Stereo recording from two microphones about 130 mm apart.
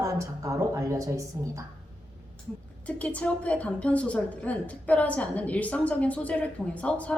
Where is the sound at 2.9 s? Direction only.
10° left (ahead or behind).